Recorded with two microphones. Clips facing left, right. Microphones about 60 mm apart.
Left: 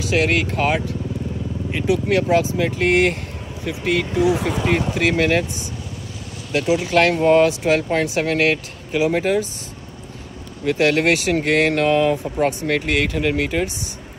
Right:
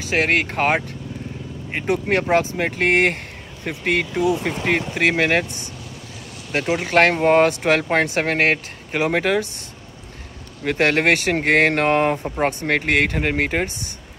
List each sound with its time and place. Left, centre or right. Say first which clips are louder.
0.0 s speech: left 1 dB; right
4.2 s speech: left 4 dB; left
4.5 s speech: left 2 dB; right
10.6 s speech: left 1 dB; right